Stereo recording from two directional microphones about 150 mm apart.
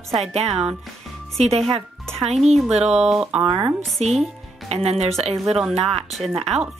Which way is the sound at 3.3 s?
40° right (ahead or behind).